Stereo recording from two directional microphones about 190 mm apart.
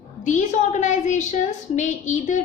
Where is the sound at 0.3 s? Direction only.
40° left (ahead or behind).